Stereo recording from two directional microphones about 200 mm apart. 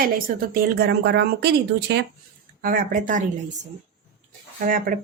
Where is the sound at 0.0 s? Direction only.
45° right (ahead or behind).